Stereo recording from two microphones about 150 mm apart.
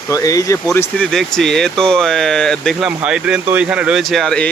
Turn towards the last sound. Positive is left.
turn(degrees=5)  # may be behind; listen again after turning